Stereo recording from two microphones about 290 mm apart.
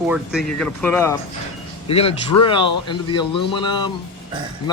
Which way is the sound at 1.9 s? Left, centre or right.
Centre.